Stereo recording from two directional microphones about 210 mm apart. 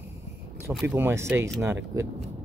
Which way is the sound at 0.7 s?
5° right (ahead or behind).